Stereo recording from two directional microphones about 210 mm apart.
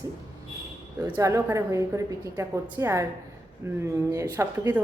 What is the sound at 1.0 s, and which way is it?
A woman's voice, 15° right (ahead or behind).